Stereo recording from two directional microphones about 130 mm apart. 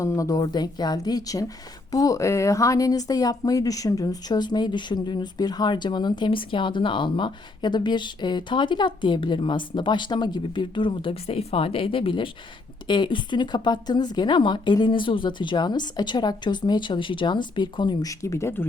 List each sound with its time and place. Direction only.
0.0 s a woman's voice: 25° left (ahead or behind)
18.1 s a woman's voice: 25° left (ahead or behind)